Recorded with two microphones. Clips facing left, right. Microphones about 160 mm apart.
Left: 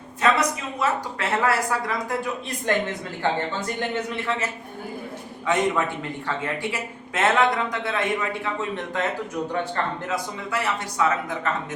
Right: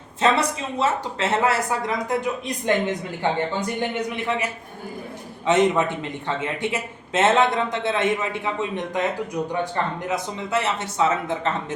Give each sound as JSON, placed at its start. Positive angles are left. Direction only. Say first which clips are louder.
{"t": 0.2, "sound": "speech", "louder": "right 1 dB", "side_deg": -25}
{"t": 5.5, "sound": "speech", "louder": "right 4 dB", "side_deg": -20}
{"t": 10.1, "sound": "speech", "louder": "right 3 dB", "side_deg": -20}